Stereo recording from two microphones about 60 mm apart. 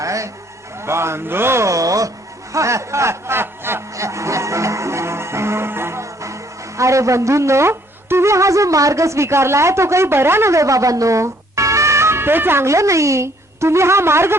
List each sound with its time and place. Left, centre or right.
0.0 s music: right
0.8 s speech: right
1.7 s speech: right
3.9 s music: right
12.6 s speech: right